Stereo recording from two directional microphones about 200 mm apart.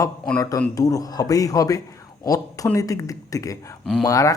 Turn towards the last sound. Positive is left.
turn(degrees=15)  # may be behind; listen again after turning